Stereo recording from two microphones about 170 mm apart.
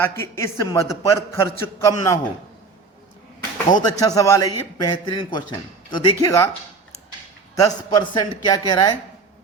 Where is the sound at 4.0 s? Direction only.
20° left (ahead or behind).